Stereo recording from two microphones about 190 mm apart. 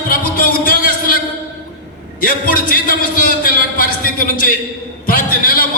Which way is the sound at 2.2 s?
50° left (ahead or behind).